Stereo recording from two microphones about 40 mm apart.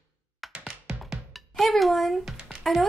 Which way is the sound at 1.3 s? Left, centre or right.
Centre.